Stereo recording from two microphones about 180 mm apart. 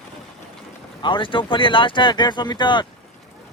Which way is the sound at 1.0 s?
25° left (ahead or behind).